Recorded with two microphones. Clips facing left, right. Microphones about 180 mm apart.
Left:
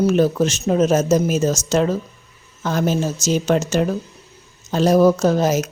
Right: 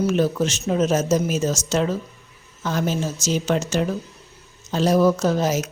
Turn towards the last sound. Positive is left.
turn(degrees=45)  # may be behind; listen again after turning